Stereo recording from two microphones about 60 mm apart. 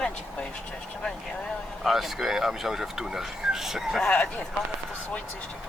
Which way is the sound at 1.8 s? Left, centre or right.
Centre.